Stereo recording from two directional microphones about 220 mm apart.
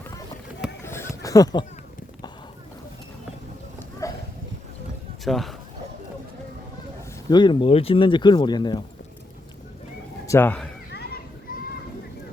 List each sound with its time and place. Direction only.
0.9 s a sound: 10° left (ahead or behind)
4.0 s a sound: 15° left (ahead or behind)
5.2 s a man's voice: centre (ahead or behind)
7.3 s speech: 20° left (ahead or behind)
10.2 s speech: 10° left (ahead or behind)
10.9 s children playing: 45° left (ahead or behind)